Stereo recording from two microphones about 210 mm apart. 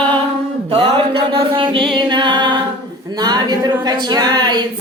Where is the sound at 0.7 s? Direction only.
25° right (ahead or behind).